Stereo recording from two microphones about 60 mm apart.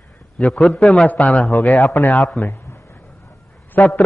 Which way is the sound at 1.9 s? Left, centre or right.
Left.